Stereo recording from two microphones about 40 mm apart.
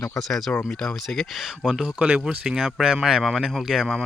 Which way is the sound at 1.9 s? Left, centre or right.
Right.